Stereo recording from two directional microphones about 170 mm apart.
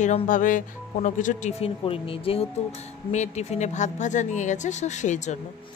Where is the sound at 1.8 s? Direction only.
35° left (ahead or behind).